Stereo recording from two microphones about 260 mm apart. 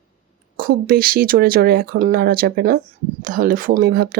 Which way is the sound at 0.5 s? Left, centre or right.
Right.